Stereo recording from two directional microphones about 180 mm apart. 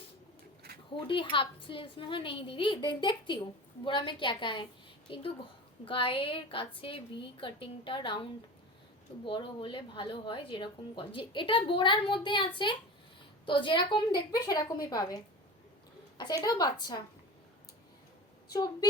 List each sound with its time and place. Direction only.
0.9 s a woman's voice: 30° left (ahead or behind)
9.2 s a woman's voice: 30° left (ahead or behind)
18.4 s a woman's voice: 20° left (ahead or behind)